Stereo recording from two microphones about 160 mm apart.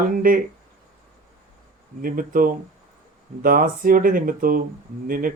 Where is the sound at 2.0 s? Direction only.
60° right (ahead or behind).